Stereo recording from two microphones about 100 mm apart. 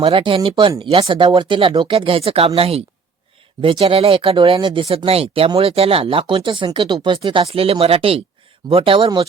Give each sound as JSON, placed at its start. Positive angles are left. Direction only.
{"t": 0.0, "sound": "speech", "side_deg": -60}
{"t": 3.6, "sound": "speech", "side_deg": -65}
{"t": 4.9, "sound": "speech", "side_deg": -75}
{"t": 7.2, "sound": "speech", "side_deg": -65}
{"t": 8.7, "sound": "speech", "side_deg": -60}